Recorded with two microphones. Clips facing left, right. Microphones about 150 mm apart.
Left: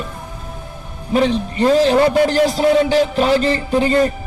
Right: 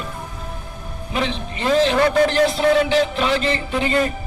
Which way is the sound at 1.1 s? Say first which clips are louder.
Left 8 dB; 45° left (ahead or behind).